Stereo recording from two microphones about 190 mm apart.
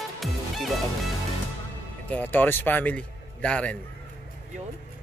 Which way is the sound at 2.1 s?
10° left (ahead or behind).